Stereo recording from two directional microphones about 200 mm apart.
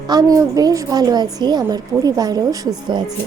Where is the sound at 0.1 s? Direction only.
15° right (ahead or behind).